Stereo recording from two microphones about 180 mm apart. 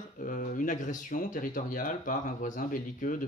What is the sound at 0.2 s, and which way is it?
Speech, 45° left (ahead or behind).